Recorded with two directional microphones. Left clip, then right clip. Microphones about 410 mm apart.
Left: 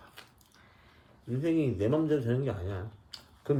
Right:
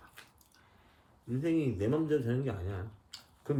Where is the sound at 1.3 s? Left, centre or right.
Centre.